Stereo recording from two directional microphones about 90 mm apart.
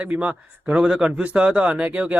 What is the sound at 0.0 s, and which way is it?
Speech, 15° right (ahead or behind).